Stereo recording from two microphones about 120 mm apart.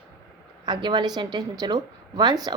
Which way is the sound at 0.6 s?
40° right (ahead or behind).